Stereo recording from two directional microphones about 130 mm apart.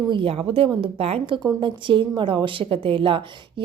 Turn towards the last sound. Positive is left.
turn(degrees=-45)  # may be behind; listen again after turning